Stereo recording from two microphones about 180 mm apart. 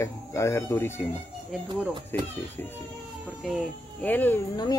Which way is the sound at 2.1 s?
10° left (ahead or behind).